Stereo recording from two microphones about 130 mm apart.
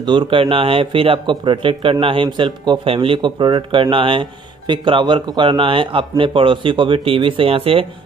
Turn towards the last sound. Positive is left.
turn(degrees=-45)  # may be behind; listen again after turning